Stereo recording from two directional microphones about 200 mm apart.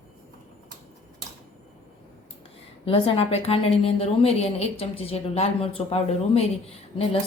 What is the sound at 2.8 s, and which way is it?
A woman's voice, 30° left (ahead or behind).